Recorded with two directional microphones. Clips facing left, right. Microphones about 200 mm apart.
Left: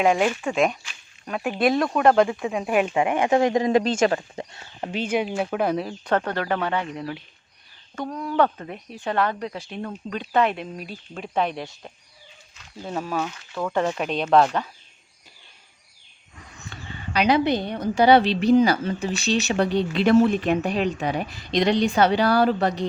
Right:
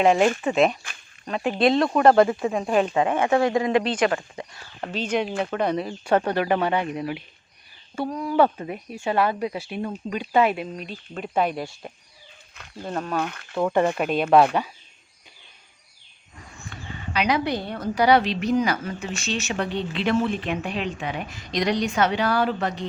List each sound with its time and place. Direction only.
0.0 s speech: centre (ahead or behind)
1.5 s speech: 25° right (ahead or behind)
2.0 s speech: centre (ahead or behind); by 3.7 s 20° left (ahead or behind)
3.7 s a woman's voice: 40° left (ahead or behind)
4.0 s speech: 30° left (ahead or behind)
4.8 s speech: 15° left (ahead or behind)
6.1 s speech: 15° right (ahead or behind)
10.8 s speech: 5° left (ahead or behind)
12.8 s speech: 5° left (ahead or behind)
13.2 s speech: 55° right (ahead or behind)
13.6 s speech: 20° right (ahead or behind)
13.9 s speech: 5° right (ahead or behind)
16.7 s a sound: 30° left (ahead or behind)
17.2 s a woman's voice: 30° left (ahead or behind)